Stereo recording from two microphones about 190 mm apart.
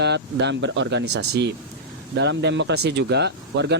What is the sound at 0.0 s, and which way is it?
Speech, 65° right (ahead or behind).